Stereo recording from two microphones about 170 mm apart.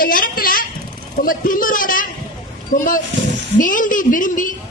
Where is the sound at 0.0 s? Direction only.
55° left (ahead or behind).